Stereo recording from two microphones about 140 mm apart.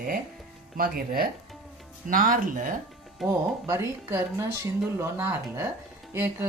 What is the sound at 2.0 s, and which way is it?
Speech, 75° right (ahead or behind).